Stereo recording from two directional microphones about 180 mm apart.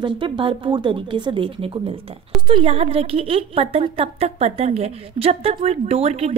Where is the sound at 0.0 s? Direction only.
30° right (ahead or behind).